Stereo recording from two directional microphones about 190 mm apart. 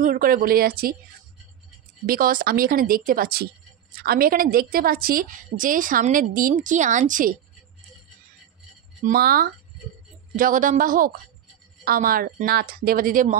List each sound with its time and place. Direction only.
0.0 s a woman's voice: 45° right (ahead or behind)
2.0 s a woman's voice: 50° right (ahead or behind)
9.0 s a woman's voice: 50° right (ahead or behind)